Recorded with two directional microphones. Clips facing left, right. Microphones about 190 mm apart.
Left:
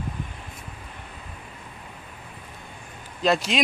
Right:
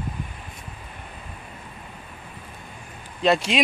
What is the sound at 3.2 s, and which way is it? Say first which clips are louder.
Speech: right 2 dB; centre (ahead or behind).